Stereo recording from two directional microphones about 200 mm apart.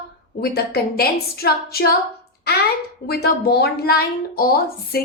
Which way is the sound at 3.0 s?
50° left (ahead or behind).